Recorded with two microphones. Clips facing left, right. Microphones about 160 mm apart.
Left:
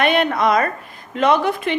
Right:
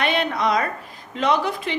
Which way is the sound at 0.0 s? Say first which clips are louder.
Left 5 dB; 55° left (ahead or behind).